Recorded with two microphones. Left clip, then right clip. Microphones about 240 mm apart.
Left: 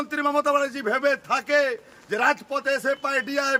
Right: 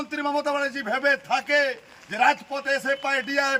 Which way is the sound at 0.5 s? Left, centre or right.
Centre.